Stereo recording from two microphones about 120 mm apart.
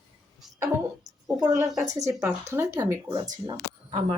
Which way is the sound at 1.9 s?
30° right (ahead or behind).